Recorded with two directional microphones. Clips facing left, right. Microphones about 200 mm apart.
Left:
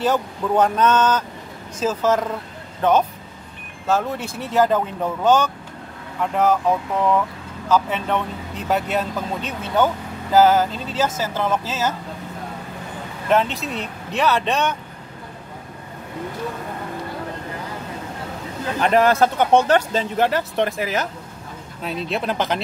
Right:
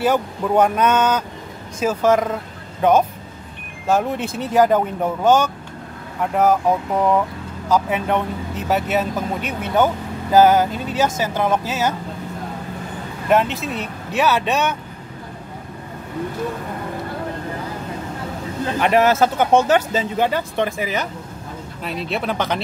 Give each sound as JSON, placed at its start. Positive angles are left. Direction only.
{"t": 0.0, "sound": "speech", "side_deg": -10}
{"t": 13.3, "sound": "speech", "side_deg": -5}
{"t": 18.8, "sound": "speech", "side_deg": -5}